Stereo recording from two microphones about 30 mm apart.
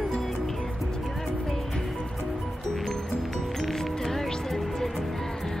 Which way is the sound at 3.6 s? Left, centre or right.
Centre.